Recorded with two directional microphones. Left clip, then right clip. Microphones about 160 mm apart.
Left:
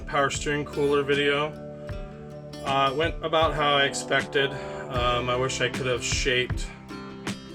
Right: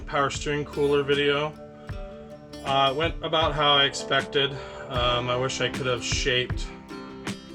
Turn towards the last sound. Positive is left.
turn(degrees=0)  # may be behind; listen again after turning